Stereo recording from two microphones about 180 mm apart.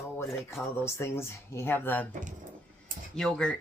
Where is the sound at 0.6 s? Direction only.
15° left (ahead or behind).